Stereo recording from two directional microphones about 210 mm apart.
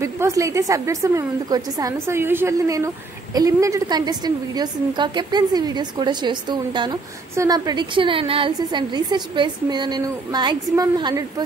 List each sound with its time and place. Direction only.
0.0 s a woman's voice: 15° right (ahead or behind)